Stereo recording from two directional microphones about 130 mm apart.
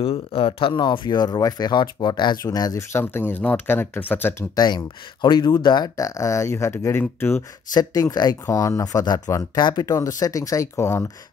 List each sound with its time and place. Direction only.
0.0 s speech: 45° left (ahead or behind); by 3.0 s 30° left (ahead or behind)
3.0 s speech: 15° left (ahead or behind)
4.6 s speech: 35° left (ahead or behind); by 7.4 s 15° left (ahead or behind)
7.7 s speech: 30° left (ahead or behind)